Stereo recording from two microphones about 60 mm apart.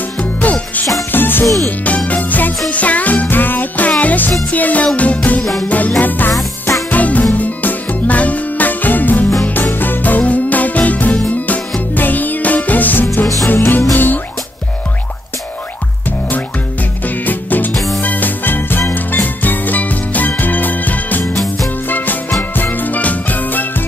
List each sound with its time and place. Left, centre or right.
0.2 s music: left
1.9 s music: left
5.4 s music: centre
5.7 s music: left
17.0 s music: left
17.7 s music: centre
18.0 s music: left